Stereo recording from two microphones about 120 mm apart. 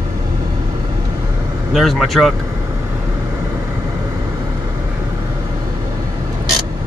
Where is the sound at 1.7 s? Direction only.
Centre (ahead or behind).